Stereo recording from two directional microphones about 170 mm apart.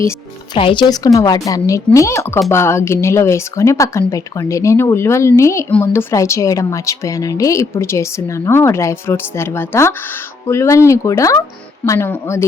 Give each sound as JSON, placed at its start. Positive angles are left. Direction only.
{"t": 0.5, "sound": "a woman's voice", "side_deg": 30}